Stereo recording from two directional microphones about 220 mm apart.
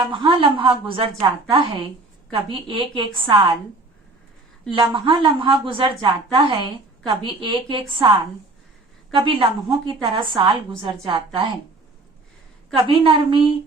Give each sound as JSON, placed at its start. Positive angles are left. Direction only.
{"t": 0.1, "sound": "a woman's voice", "side_deg": -25}
{"t": 4.7, "sound": "a woman's voice", "side_deg": -20}
{"t": 12.7, "sound": "a woman's voice", "side_deg": -25}